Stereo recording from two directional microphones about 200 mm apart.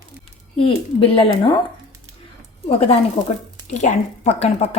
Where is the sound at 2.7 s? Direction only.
30° left (ahead or behind).